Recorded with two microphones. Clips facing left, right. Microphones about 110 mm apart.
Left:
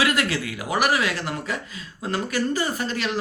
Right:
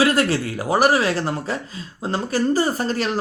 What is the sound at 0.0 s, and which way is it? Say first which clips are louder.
Speech: right 5 dB; 35° right (ahead or behind).